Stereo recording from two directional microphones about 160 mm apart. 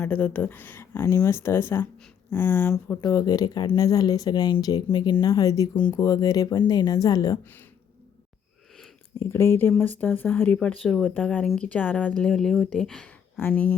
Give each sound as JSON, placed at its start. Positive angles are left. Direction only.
{"t": 0.0, "sound": "speech", "side_deg": 10}
{"t": 3.0, "sound": "speech", "side_deg": 25}
{"t": 9.1, "sound": "speech", "side_deg": 15}